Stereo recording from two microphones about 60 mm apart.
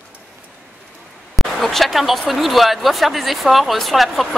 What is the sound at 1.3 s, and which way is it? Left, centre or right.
Speech, centre.